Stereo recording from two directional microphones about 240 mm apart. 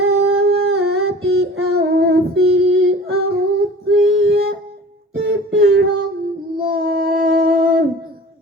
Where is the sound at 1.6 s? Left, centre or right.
Right.